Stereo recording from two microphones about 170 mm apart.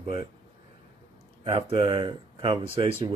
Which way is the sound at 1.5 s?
35° right (ahead or behind).